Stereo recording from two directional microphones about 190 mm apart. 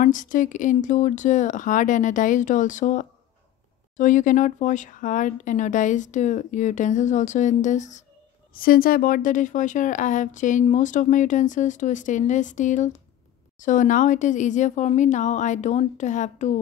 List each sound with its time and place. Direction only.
0.0 s speech: 45° left (ahead or behind)